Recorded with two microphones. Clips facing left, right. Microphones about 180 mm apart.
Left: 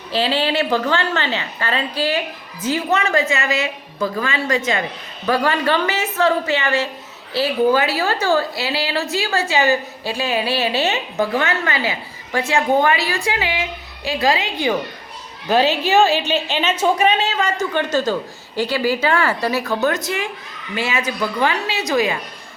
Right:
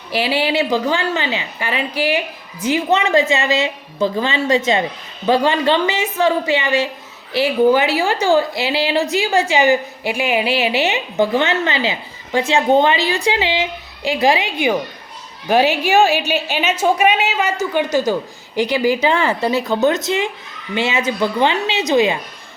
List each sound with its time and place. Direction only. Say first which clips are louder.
0.1 s a woman's voice: right 1 dB; 10° right (ahead or behind)